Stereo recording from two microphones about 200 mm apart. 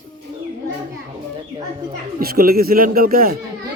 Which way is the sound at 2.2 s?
50° right (ahead or behind).